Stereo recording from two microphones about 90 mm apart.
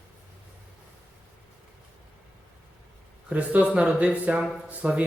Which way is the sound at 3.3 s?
15° right (ahead or behind).